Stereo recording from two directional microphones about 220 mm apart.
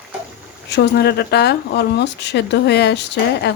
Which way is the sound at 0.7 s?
50° left (ahead or behind).